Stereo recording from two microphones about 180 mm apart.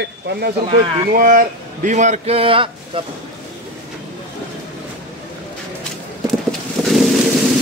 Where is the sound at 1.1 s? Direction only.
50° right (ahead or behind); by 3.0 s 30° right (ahead or behind).